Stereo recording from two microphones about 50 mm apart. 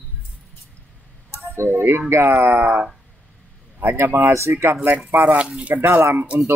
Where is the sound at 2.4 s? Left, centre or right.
Right.